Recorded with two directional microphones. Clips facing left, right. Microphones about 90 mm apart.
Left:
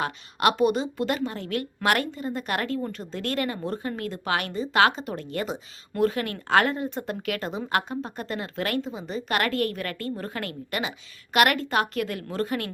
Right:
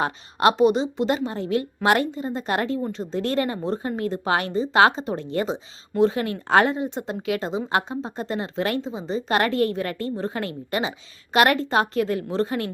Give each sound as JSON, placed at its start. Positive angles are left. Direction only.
{"t": 0.0, "sound": "speech", "side_deg": -30}